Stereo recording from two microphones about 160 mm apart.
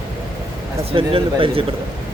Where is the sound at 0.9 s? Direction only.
35° right (ahead or behind).